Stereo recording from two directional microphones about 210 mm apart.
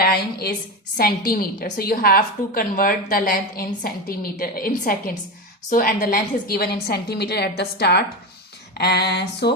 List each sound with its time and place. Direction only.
0.0 s a woman's voice: 50° left (ahead or behind)